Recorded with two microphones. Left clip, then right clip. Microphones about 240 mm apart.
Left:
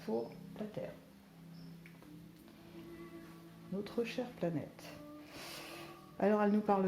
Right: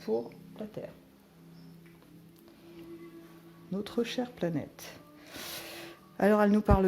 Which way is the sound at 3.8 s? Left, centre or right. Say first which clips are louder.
Right 6 dB; right.